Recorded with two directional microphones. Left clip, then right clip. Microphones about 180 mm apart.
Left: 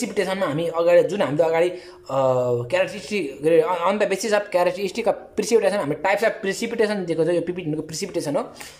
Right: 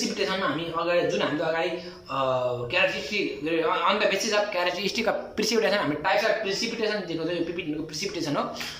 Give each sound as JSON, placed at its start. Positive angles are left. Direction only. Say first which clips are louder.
{"t": 0.4, "sound": "speech", "louder": "left 5 dB", "side_deg": 35}